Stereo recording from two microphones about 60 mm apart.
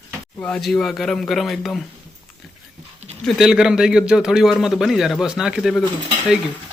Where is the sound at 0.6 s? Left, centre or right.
Centre.